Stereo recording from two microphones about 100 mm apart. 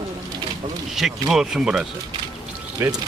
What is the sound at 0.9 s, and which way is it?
Speech, 5° right (ahead or behind).